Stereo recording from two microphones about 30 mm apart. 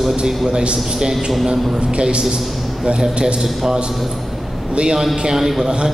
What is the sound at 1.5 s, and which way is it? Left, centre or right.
Speech, right.